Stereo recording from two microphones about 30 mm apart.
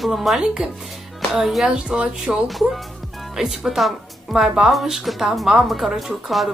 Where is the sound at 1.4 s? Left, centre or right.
Centre.